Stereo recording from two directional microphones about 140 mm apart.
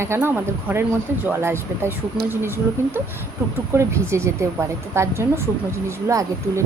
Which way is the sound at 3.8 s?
20° right (ahead or behind).